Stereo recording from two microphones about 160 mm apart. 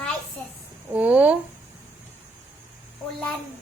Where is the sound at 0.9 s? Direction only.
10° right (ahead or behind).